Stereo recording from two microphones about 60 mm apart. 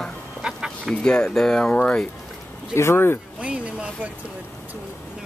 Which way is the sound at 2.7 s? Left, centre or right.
Left.